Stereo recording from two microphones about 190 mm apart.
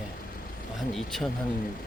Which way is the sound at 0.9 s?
Centre (ahead or behind).